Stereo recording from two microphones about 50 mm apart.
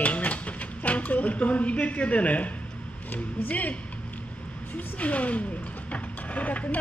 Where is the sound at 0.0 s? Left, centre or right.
Left.